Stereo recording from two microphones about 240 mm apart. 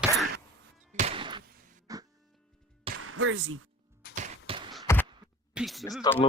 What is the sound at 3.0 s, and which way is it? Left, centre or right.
Speech, right.